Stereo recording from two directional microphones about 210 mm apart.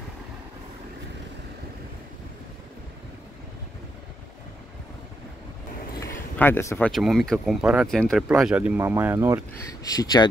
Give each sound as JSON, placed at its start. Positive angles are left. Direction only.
{"t": 6.3, "sound": "speech", "side_deg": 10}
{"t": 6.9, "sound": "speech", "side_deg": 0}
{"t": 9.8, "sound": "speech", "side_deg": 20}